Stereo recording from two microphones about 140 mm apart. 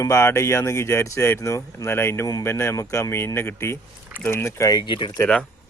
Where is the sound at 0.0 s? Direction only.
20° left (ahead or behind); by 5.1 s 35° left (ahead or behind).